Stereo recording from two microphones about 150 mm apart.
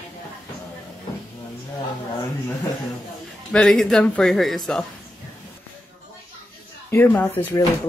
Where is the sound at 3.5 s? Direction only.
5° left (ahead or behind).